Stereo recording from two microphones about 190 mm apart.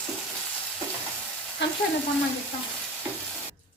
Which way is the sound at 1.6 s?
70° left (ahead or behind).